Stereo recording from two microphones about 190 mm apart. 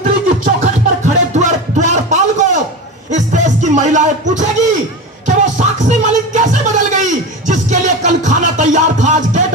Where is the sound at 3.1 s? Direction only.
40° right (ahead or behind).